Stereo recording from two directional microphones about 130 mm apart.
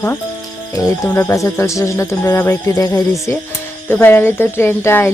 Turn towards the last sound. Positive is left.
turn(degrees=20)  # may be behind; listen again after turning